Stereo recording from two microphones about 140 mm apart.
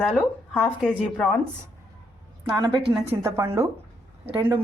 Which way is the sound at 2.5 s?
30° right (ahead or behind).